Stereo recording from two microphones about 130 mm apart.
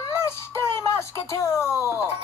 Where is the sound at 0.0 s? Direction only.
20° left (ahead or behind).